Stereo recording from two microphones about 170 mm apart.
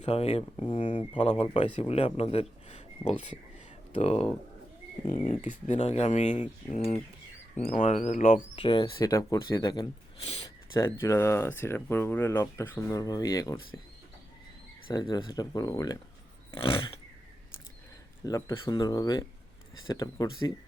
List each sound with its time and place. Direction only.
0.0 s speech: 35° left (ahead or behind)
5.0 s speech: 50° left (ahead or behind)
7.6 s speech: 50° left (ahead or behind)
8.5 s speech: 30° left (ahead or behind)
14.8 s speech: 25° left (ahead or behind)
16.5 s a sound: 30° left (ahead or behind)
18.3 s speech: 20° left (ahead or behind)